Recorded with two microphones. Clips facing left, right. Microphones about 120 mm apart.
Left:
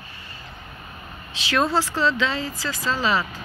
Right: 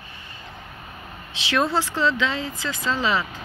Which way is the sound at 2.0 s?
20° right (ahead or behind).